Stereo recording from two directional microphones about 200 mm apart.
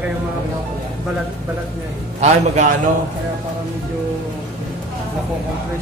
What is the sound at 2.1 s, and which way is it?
Speech, 35° right (ahead or behind).